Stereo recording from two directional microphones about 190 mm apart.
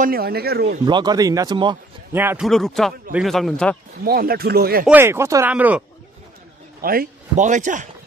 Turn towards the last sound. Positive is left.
turn(degrees=-40)  # may be behind; listen again after turning